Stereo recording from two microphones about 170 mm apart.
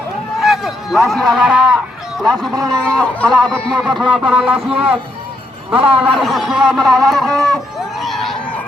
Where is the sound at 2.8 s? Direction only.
5° left (ahead or behind).